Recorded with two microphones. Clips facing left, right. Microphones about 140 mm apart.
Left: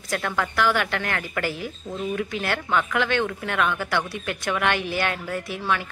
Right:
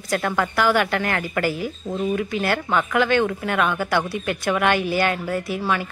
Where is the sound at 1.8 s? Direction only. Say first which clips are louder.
Right 5 dB; 20° right (ahead or behind).